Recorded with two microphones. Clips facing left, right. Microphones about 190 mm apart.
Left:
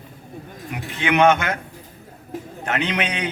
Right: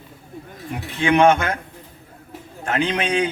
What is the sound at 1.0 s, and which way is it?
Speech, 30° right (ahead or behind).